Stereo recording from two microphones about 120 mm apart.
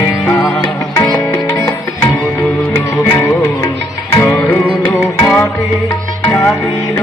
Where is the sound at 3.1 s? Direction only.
20° left (ahead or behind).